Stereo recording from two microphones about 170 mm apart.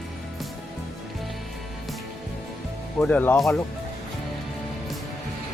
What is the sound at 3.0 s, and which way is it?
Speech, 10° left (ahead or behind).